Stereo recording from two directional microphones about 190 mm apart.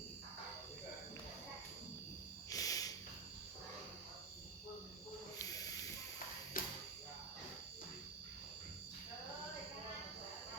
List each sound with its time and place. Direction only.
2.5 s a sound: 20° left (ahead or behind)
5.4 s snake: 20° left (ahead or behind)
6.5 s music: 45° left (ahead or behind)